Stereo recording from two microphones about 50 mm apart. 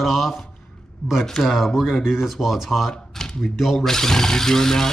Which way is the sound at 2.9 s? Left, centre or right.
Centre.